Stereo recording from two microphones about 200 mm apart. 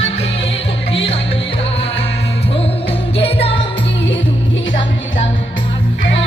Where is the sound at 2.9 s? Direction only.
30° left (ahead or behind).